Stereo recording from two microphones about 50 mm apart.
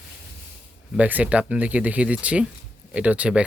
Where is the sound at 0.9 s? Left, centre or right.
Right.